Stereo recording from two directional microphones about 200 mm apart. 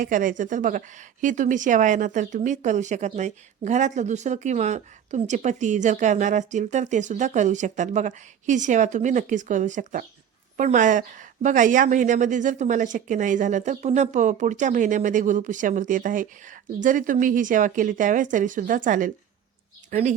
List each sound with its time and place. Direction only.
0.0 s speech: 40° right (ahead or behind)